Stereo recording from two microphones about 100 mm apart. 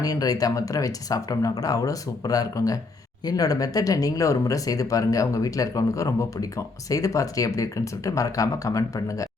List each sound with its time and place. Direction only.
0.0 s speech: 40° left (ahead or behind)